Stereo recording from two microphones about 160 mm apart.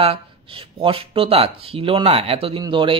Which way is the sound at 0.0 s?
35° right (ahead or behind).